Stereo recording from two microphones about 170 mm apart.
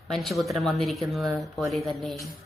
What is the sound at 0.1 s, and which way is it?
A woman's voice, centre (ahead or behind).